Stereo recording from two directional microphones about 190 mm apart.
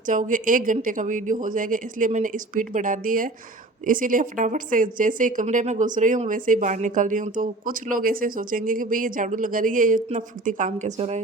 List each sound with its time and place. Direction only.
0.0 s a woman's voice: 45° right (ahead or behind)